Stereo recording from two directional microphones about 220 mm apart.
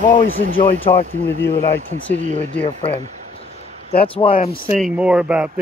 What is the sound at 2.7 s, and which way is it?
Speech, 20° left (ahead or behind).